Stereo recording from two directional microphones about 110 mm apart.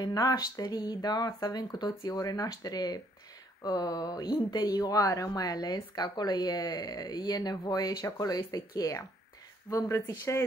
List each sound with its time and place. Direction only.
0.0 s a woman's voice: 35° left (ahead or behind)